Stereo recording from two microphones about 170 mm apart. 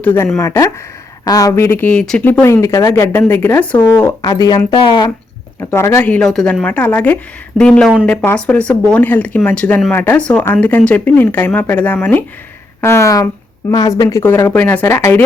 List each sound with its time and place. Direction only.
0.0 s speech: 10° left (ahead or behind)
3.9 s speech: 20° left (ahead or behind)
5.5 s speech: 15° left (ahead or behind)